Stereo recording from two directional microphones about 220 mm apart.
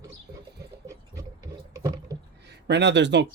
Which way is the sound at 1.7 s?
15° right (ahead or behind).